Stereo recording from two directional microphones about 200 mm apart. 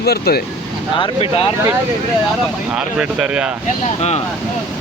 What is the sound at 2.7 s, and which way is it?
Speech, 5° right (ahead or behind).